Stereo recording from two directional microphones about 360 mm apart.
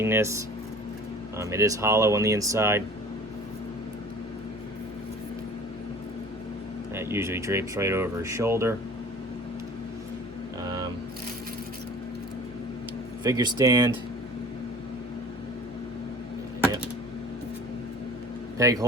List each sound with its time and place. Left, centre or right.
0.0 s speech: centre
1.4 s speech: centre
6.9 s speech: centre
13.2 s speech: centre
18.5 s speech: centre